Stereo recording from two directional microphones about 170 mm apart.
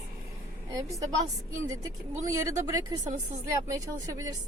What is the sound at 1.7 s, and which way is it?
Speech, 20° right (ahead or behind).